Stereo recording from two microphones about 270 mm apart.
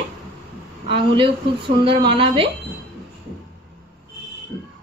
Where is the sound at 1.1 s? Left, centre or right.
Centre.